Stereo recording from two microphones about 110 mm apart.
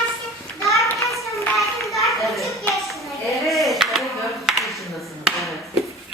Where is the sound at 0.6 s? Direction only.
30° left (ahead or behind).